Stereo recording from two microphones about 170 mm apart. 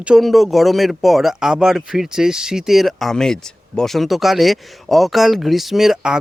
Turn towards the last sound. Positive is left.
turn(degrees=0)  # may be behind; listen again after turning